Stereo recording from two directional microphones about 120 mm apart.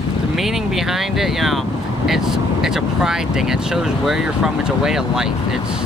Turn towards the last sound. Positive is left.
turn(degrees=-5)  # may be behind; listen again after turning